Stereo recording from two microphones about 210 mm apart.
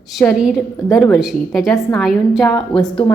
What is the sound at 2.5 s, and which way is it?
Speech, 20° left (ahead or behind).